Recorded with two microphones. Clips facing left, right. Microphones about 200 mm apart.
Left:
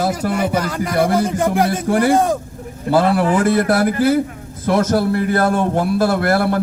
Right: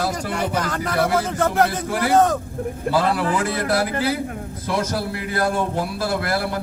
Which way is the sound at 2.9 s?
55° left (ahead or behind).